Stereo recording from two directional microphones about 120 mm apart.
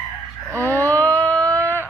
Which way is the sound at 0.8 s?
10° left (ahead or behind).